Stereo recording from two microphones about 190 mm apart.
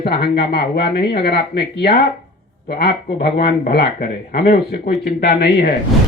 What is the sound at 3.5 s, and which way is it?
Speech, 50° left (ahead or behind).